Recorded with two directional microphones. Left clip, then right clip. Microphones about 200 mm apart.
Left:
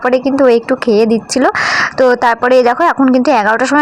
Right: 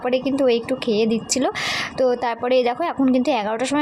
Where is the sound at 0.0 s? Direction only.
15° left (ahead or behind).